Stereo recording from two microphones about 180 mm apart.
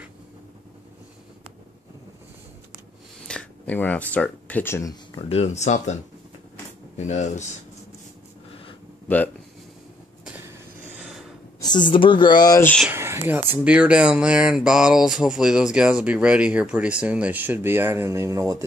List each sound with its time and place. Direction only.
3.3 s speech: 5° left (ahead or behind)
5.3 s speech: 35° left (ahead or behind)
7.0 s speech: 40° left (ahead or behind)
9.0 s speech: 10° left (ahead or behind)
10.2 s train: 10° right (ahead or behind)
11.0 s a sound: 5° right (ahead or behind)
11.9 s speech: 25° left (ahead or behind)
12.9 s speech: 15° right (ahead or behind)